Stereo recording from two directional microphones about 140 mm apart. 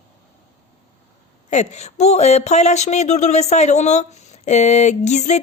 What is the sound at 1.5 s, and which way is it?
Speech, 55° left (ahead or behind).